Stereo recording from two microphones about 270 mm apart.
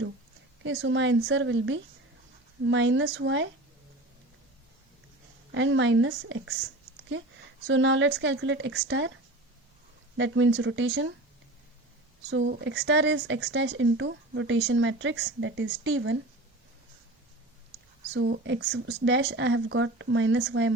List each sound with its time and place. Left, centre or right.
0.6 s speech: right
5.5 s speech: right
10.2 s speech: right
12.3 s speech: right
18.1 s speech: right